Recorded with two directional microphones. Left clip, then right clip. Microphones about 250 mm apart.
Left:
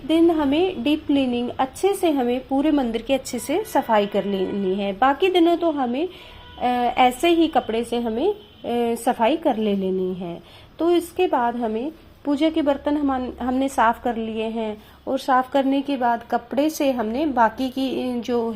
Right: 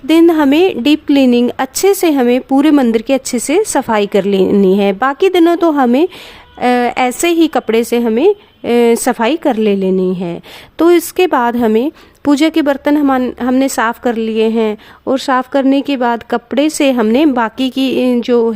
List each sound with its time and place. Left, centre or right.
0.1 s a woman's voice: right